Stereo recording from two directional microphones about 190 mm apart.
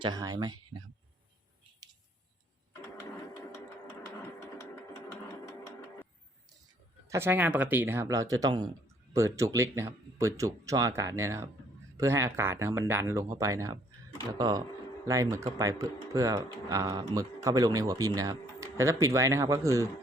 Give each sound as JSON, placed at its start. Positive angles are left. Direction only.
{"t": 0.0, "sound": "speech", "side_deg": -20}
{"t": 7.1, "sound": "speech", "side_deg": -10}